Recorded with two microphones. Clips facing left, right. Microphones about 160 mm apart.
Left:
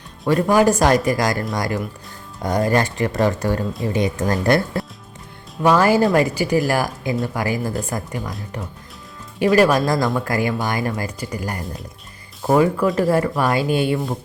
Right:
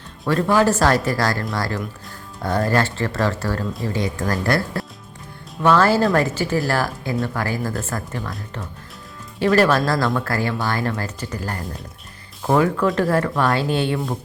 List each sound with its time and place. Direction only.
0.3 s speech: 15° left (ahead or behind)
9.4 s speech: 15° left (ahead or behind)